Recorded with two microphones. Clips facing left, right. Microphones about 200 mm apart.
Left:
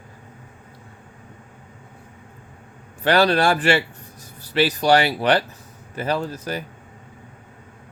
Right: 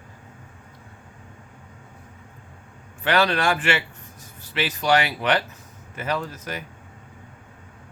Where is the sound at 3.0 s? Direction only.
35° left (ahead or behind).